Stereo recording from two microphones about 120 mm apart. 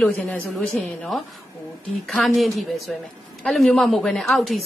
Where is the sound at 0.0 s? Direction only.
10° left (ahead or behind).